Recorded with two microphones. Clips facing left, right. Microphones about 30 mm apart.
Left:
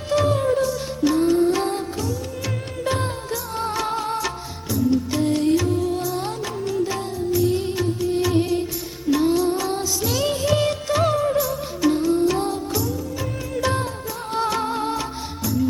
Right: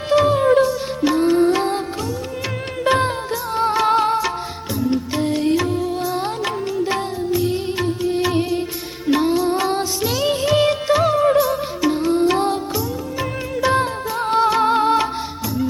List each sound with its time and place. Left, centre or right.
0.1 s music: right
2.8 s music: right
3.5 s music: right
3.8 s music: right
4.7 s music: right
5.1 s music: right
9.0 s music: right
10.1 s music: centre
10.9 s music: centre
11.3 s music: right
11.8 s music: right
12.0 s music: right
14.3 s music: right
14.6 s music: right